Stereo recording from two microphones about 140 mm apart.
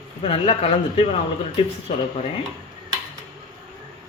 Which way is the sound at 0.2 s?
45° left (ahead or behind).